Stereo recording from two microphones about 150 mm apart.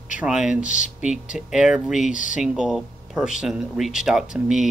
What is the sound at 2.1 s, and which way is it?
Speech, 60° left (ahead or behind).